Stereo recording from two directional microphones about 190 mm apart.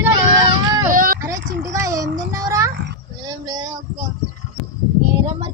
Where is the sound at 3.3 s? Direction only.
20° right (ahead or behind).